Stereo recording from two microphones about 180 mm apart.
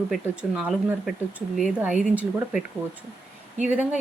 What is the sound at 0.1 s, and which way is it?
Speech, 5° right (ahead or behind).